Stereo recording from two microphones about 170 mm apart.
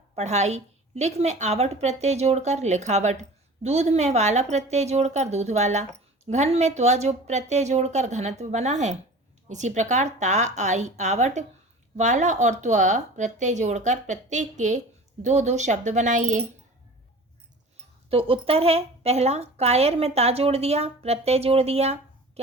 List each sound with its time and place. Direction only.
0.2 s a woman's voice: 40° right (ahead or behind)
18.1 s a woman's voice: 35° right (ahead or behind)